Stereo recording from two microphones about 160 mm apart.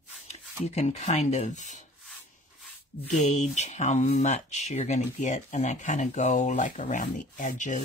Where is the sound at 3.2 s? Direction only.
45° left (ahead or behind).